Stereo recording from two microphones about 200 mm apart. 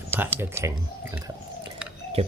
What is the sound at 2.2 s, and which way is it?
Speech, 30° right (ahead or behind).